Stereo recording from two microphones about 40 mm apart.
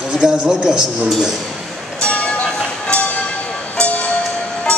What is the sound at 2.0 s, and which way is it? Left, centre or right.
Vehicle, left.